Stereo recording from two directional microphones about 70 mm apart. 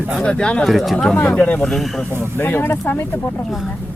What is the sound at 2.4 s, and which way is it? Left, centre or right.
Speech, left.